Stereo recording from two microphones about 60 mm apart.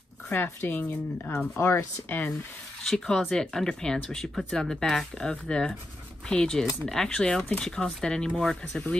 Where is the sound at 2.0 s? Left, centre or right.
Left.